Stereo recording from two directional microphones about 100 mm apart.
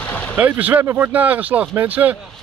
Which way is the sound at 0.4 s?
15° right (ahead or behind).